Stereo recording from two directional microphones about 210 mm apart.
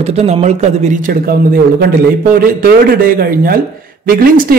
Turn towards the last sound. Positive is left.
turn(degrees=-40)  # may be behind; listen again after turning